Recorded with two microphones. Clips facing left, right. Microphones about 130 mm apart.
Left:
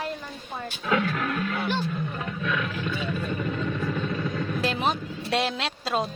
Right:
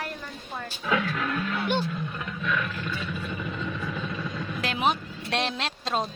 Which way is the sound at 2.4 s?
5° left (ahead or behind).